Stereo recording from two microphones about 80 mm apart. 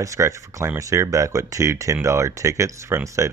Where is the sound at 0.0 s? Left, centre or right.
Right.